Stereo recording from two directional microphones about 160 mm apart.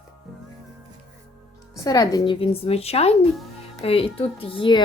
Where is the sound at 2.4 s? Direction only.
40° left (ahead or behind).